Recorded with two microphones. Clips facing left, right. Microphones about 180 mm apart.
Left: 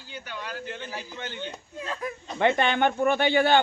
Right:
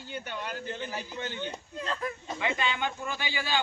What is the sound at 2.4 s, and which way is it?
A man's voice, 60° left (ahead or behind).